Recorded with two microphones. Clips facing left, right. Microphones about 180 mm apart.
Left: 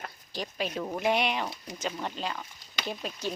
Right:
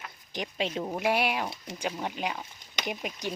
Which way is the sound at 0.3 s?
20° right (ahead or behind).